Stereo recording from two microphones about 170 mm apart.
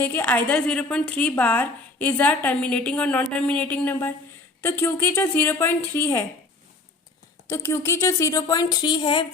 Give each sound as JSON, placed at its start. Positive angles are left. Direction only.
{"t": 0.0, "sound": "a woman's voice", "side_deg": 10}
{"t": 7.4, "sound": "speech", "side_deg": 15}